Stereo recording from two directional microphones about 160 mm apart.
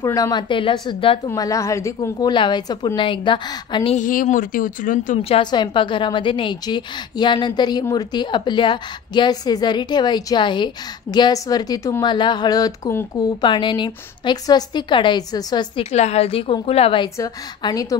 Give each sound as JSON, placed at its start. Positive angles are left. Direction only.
{"t": 0.0, "sound": "a woman's voice", "side_deg": 20}
{"t": 1.3, "sound": "a woman's voice", "side_deg": 20}
{"t": 3.9, "sound": "speech", "side_deg": 55}
{"t": 5.3, "sound": "a woman's voice", "side_deg": 30}